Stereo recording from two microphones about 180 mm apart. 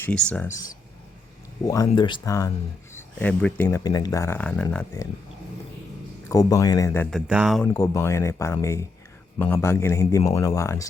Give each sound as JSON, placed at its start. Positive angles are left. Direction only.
{"t": 0.0, "sound": "a man's voice", "side_deg": 5}
{"t": 0.4, "sound": "a man's voice", "side_deg": 20}
{"t": 3.8, "sound": "a man's voice", "side_deg": 20}
{"t": 6.2, "sound": "a man's voice", "side_deg": 20}
{"t": 7.3, "sound": "speech", "side_deg": -5}
{"t": 7.7, "sound": "a man's voice", "side_deg": 15}